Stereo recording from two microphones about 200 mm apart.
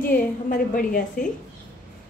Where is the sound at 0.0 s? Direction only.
45° left (ahead or behind).